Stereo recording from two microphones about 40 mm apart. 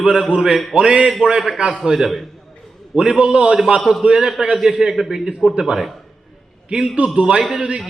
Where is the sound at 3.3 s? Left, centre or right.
Right.